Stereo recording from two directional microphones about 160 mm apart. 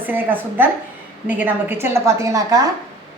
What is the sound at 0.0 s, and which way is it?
A woman's voice, 10° right (ahead or behind).